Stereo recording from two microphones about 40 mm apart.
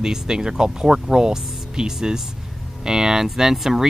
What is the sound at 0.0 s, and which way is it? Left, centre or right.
Speech, centre.